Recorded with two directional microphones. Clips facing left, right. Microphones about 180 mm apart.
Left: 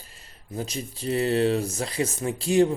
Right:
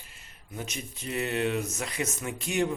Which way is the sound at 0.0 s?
35° left (ahead or behind).